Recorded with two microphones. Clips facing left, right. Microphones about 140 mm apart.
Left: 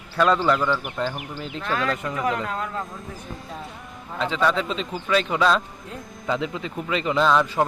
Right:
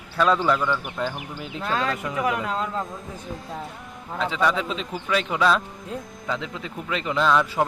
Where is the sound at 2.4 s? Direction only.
20° right (ahead or behind).